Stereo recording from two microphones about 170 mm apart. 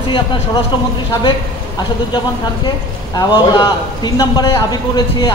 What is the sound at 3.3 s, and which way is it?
A man's voice, 25° left (ahead or behind).